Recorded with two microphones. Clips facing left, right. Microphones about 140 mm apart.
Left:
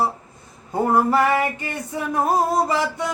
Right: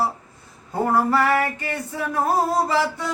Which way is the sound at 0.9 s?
15° left (ahead or behind).